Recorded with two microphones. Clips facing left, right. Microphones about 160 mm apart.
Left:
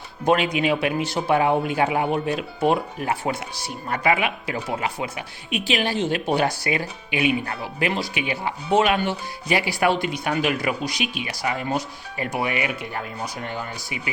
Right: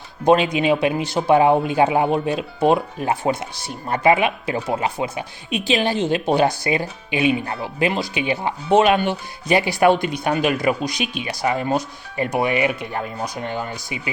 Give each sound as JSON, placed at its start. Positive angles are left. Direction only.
{"t": 0.3, "sound": "speech", "side_deg": -25}
{"t": 11.0, "sound": "speech", "side_deg": 15}
{"t": 11.3, "sound": "speech", "side_deg": -25}